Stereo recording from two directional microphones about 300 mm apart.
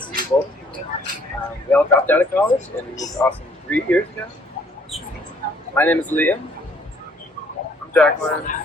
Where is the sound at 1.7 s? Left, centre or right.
Centre.